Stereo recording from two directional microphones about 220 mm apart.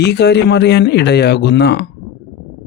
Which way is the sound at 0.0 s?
50° left (ahead or behind).